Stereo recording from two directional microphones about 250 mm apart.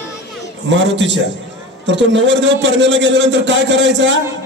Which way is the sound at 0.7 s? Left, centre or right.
Right.